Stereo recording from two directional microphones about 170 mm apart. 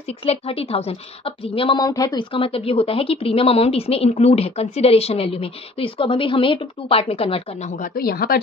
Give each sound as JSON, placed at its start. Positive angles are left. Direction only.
{"t": 0.2, "sound": "speech", "side_deg": 35}
{"t": 7.7, "sound": "speech", "side_deg": 55}